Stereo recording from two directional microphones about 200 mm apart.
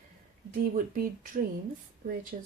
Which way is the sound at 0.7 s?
40° right (ahead or behind).